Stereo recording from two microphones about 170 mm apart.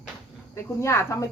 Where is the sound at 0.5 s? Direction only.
15° left (ahead or behind).